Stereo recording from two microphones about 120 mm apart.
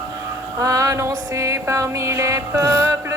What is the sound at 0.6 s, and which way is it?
Music, 25° right (ahead or behind).